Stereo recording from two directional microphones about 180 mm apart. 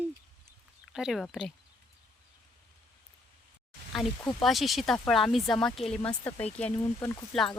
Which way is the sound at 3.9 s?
Centre (ahead or behind).